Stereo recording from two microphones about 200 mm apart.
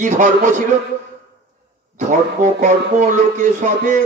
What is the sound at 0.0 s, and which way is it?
Mantra, 40° right (ahead or behind).